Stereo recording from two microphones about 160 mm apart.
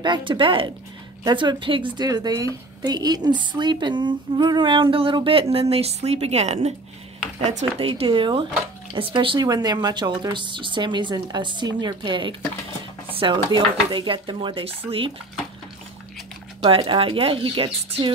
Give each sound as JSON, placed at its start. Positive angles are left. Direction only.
{"t": 0.0, "sound": "speech", "side_deg": -30}
{"t": 7.9, "sound": "speech", "side_deg": -30}
{"t": 16.6, "sound": "speech", "side_deg": -30}